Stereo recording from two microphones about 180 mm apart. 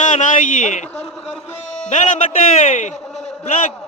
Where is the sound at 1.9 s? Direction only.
40° left (ahead or behind).